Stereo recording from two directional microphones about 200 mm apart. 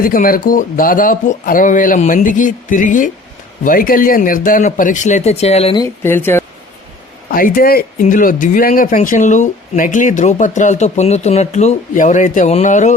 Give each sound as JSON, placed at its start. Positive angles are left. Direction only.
{"t": 0.0, "sound": "speech", "side_deg": 45}
{"t": 5.8, "sound": "speech", "side_deg": 10}
{"t": 7.3, "sound": "speech", "side_deg": 45}